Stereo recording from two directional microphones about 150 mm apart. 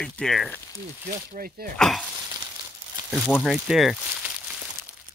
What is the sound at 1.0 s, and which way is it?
Speech, 75° right (ahead or behind).